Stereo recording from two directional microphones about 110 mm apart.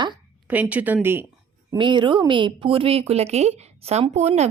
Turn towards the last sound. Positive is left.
turn(degrees=-90)